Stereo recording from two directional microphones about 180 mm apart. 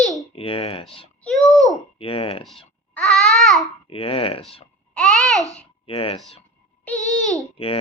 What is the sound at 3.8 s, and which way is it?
Speech, 30° left (ahead or behind).